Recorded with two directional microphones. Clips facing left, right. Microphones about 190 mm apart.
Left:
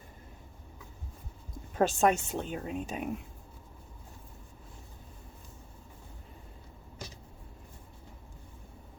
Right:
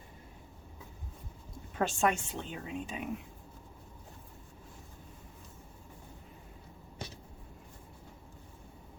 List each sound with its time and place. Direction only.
1.8 s speech: 40° left (ahead or behind)